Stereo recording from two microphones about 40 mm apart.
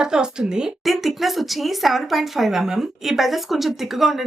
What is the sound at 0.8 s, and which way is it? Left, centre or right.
Speech, centre.